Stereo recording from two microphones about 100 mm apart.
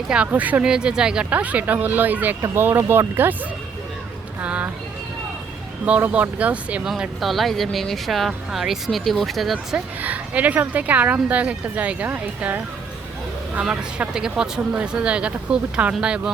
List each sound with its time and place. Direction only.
0.1 s speech: 15° right (ahead or behind)
4.4 s speech: 15° right (ahead or behind)
5.8 s speech: 15° right (ahead or behind)
6.9 s speech: centre (ahead or behind)
9.7 s speech: 15° right (ahead or behind)